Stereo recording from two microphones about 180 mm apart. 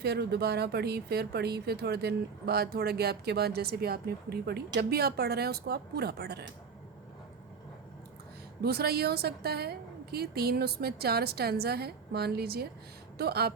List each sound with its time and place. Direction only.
0.0 s speech: 65° right (ahead or behind)
8.6 s speech: 60° right (ahead or behind)